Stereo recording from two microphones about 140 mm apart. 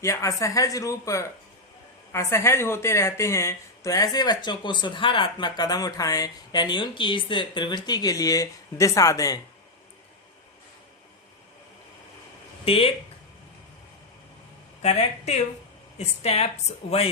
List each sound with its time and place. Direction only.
0.0 s speech: 20° left (ahead or behind)
12.6 s speech: 40° left (ahead or behind)
14.8 s a woman's voice: 50° left (ahead or behind)